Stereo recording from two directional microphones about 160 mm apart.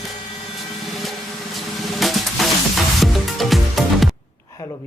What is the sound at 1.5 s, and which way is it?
Music, centre (ahead or behind).